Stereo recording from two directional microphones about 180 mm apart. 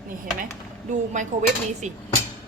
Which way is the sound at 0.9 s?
45° right (ahead or behind).